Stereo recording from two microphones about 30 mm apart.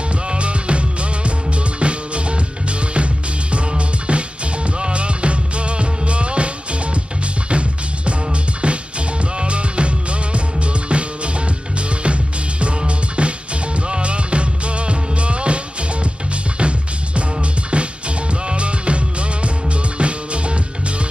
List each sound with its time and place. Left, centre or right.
0.1 s music: right
3.5 s music: right